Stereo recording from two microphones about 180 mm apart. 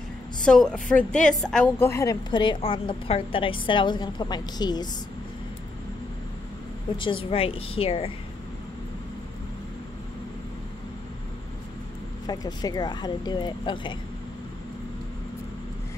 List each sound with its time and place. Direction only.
0.5 s a woman's voice: 5° left (ahead or behind); by 4.8 s 25° left (ahead or behind)
7.0 s a woman's voice: 30° left (ahead or behind)
12.3 s a woman's voice: 20° left (ahead or behind)